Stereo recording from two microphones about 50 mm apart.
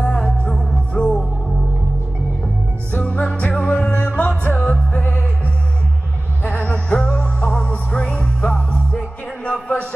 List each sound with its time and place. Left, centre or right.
0.0 s music: centre
2.9 s music: left
4.9 s music: left
6.4 s music: left
6.7 s music: left